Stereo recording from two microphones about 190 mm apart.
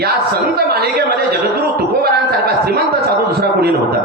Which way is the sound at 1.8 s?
55° right (ahead or behind).